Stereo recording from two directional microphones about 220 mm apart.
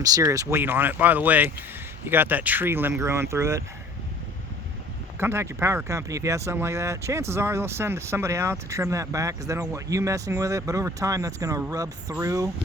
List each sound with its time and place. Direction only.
0.0 s speech: 15° right (ahead or behind)
5.2 s speech: 10° right (ahead or behind)